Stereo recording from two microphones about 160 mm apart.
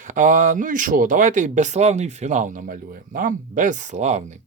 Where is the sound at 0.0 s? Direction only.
50° right (ahead or behind).